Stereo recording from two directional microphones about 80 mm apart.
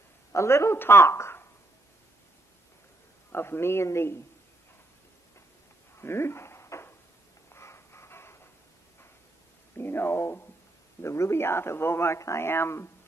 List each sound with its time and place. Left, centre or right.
0.3 s speech: left
3.3 s speech: left
5.9 s a sound: left
7.5 s music: left
9.8 s speech: left